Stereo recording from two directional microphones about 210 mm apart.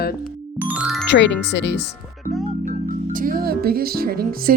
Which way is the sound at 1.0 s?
55° left (ahead or behind).